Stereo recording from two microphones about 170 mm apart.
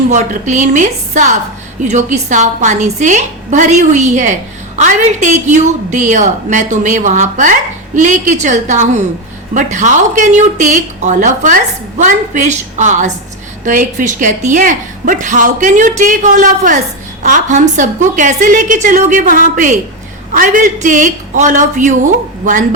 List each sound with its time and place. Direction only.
0.1 s a woman's voice: 45° right (ahead or behind)